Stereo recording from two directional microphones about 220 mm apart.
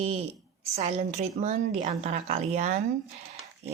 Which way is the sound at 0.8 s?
30° right (ahead or behind).